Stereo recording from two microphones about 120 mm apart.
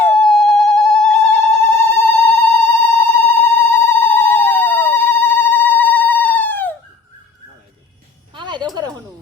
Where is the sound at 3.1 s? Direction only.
20° left (ahead or behind).